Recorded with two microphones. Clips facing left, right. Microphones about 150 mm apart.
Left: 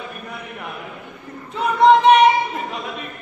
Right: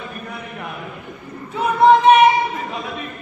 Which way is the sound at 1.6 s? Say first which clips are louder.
Even; 5° right (ahead or behind).